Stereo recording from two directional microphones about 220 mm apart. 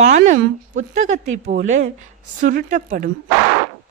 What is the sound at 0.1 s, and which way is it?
Speech, 35° right (ahead or behind).